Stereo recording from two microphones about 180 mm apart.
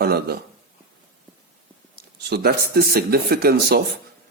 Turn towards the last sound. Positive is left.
turn(degrees=-60)  # may be behind; listen again after turning